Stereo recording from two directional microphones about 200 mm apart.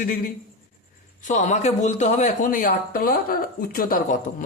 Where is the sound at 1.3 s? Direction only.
35° left (ahead or behind).